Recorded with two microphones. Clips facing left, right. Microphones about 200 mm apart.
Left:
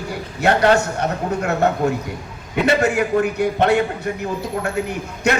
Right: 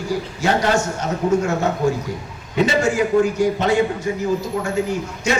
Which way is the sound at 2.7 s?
60° left (ahead or behind).